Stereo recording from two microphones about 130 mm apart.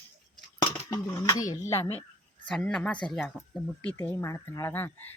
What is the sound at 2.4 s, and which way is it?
Speech, 5° left (ahead or behind).